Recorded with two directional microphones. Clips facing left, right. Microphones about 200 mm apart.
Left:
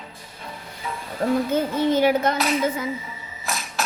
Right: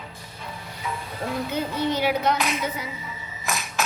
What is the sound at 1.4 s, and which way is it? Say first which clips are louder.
Speech: left 5 dB; 45° left (ahead or behind).